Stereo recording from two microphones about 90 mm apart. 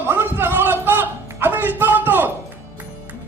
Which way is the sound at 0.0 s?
25° right (ahead or behind).